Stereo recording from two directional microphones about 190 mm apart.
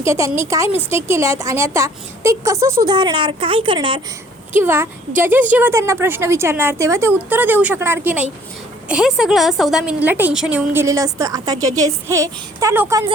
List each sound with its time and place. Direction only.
0.0 s a woman's voice: 15° right (ahead or behind)
4.5 s a woman's voice: 10° right (ahead or behind)